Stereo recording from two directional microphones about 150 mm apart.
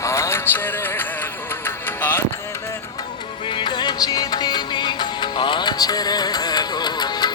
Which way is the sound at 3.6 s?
30° left (ahead or behind).